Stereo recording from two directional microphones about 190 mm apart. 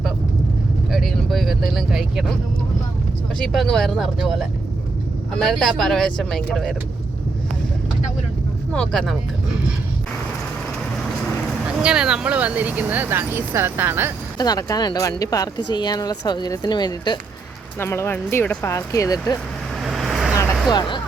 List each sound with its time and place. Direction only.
0.9 s vehicle: centre (ahead or behind)
3.3 s speech: centre (ahead or behind)
8.7 s speech: 5° left (ahead or behind)
11.8 s speech: 5° right (ahead or behind)
14.3 s speech: 20° left (ahead or behind)
19.8 s vehicle: centre (ahead or behind)
20.3 s vehicle: 20° left (ahead or behind)